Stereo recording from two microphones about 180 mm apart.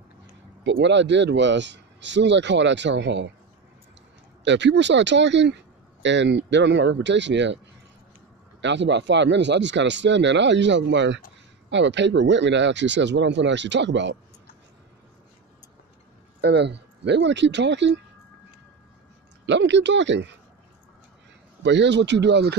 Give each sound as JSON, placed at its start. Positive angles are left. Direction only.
{"t": 0.7, "sound": "speech", "side_deg": -80}
{"t": 4.5, "sound": "speech", "side_deg": -80}
{"t": 8.5, "sound": "speech", "side_deg": -80}
{"t": 16.3, "sound": "speech", "side_deg": -70}
{"t": 19.4, "sound": "speech", "side_deg": -80}
{"t": 21.6, "sound": "speech", "side_deg": -75}